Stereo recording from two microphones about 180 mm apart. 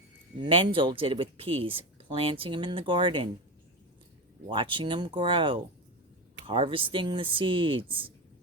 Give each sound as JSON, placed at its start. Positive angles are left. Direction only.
{"t": 0.4, "sound": "speech", "side_deg": -25}
{"t": 4.4, "sound": "speech", "side_deg": -30}